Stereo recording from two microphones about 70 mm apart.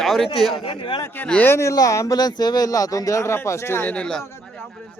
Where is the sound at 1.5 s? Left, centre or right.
Left.